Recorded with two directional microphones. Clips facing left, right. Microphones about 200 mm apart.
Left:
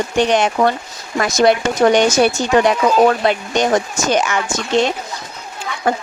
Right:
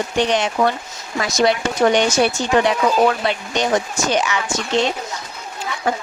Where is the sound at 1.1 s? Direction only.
50° left (ahead or behind).